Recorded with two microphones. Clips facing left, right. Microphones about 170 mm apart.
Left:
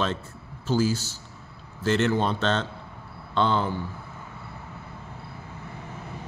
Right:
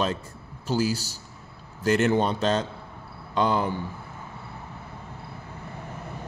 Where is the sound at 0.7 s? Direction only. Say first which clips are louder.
Left 1 dB; 10° right (ahead or behind).